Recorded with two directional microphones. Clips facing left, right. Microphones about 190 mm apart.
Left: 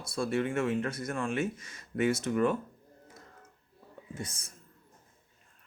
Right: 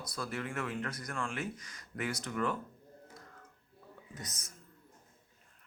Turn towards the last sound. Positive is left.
turn(degrees=30)  # may be behind; listen again after turning